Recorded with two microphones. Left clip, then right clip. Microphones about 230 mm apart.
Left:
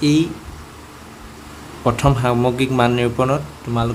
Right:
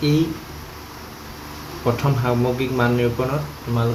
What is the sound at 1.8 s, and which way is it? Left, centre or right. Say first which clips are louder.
Speech: left 5 dB; left.